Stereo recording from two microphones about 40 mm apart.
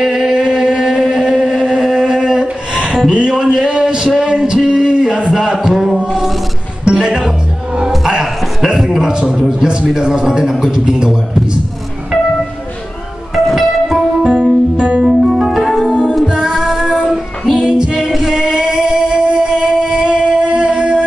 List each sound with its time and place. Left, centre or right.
0.0 s music: centre
3.1 s a sound: centre
5.6 s chant: centre
6.0 s music: centre
6.8 s music: centre
8.7 s a sound: centre
9.5 s a man's voice: right
10.4 s a sound: centre
10.7 s a man's voice: centre
13.3 s music: centre
16.5 s female singing: centre
17.6 s music: centre
18.4 s a sound: centre